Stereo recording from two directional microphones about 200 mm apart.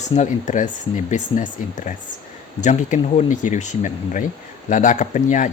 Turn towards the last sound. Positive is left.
turn(degrees=40)  # may be behind; listen again after turning